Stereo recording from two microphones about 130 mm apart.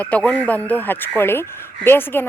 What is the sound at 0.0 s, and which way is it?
Speech, 10° left (ahead or behind).